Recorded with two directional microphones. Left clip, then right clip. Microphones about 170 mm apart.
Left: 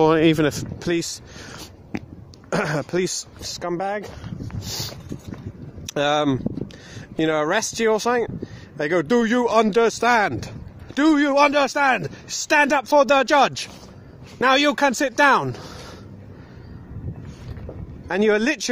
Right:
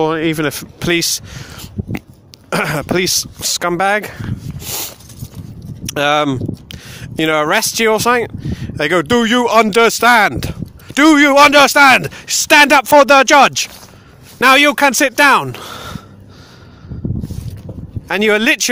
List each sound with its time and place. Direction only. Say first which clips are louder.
0.0 s speech: right 1 dB; centre (ahead or behind); by 1.2 s 20° right (ahead or behind)
2.5 s speech: right 7 dB; 15° right (ahead or behind)
3.3 s speech: right 11 dB; 30° right (ahead or behind)
5.9 s speech: right 6 dB; 15° right (ahead or behind)
18.0 s speech: right 7 dB; 15° right (ahead or behind)